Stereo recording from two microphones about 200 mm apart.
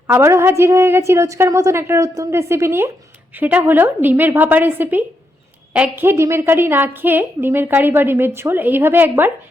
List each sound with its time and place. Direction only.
0.1 s a woman's voice: 10° right (ahead or behind)